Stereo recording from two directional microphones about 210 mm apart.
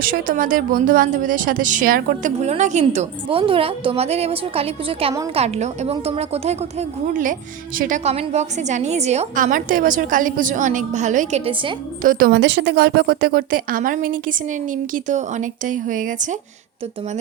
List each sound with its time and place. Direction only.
0.0 s a woman's voice: 45° right (ahead or behind)
12.0 s a woman's voice: 50° right (ahead or behind)